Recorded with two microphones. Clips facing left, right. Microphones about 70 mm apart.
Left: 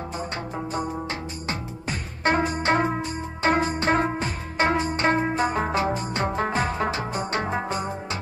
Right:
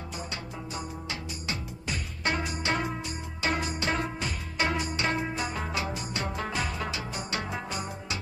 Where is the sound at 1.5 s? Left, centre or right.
Left.